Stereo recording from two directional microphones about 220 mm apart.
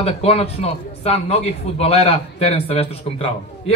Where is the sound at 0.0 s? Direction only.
25° left (ahead or behind).